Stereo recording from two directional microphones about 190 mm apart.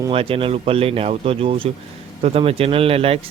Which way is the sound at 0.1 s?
30° right (ahead or behind).